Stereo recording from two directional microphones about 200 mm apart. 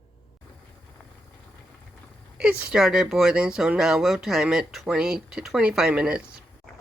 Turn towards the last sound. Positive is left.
turn(degrees=-5)  # may be behind; listen again after turning